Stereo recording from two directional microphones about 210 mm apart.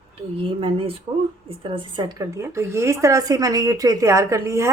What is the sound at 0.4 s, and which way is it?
A woman's voice, 25° right (ahead or behind).